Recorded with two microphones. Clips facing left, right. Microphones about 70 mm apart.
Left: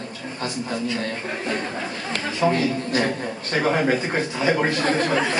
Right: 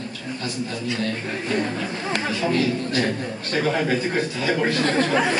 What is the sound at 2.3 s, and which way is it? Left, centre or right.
A man's voice, left.